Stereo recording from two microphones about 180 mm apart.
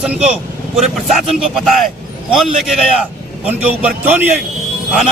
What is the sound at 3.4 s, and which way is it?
Speech, 10° right (ahead or behind).